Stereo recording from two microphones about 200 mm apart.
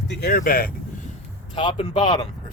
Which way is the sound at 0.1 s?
50° left (ahead or behind).